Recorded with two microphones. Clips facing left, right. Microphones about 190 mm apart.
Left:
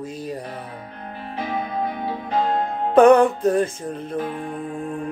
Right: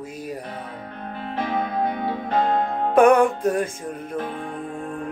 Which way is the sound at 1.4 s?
55° right (ahead or behind).